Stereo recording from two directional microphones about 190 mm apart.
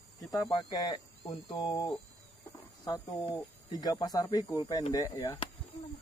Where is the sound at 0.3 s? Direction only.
20° left (ahead or behind).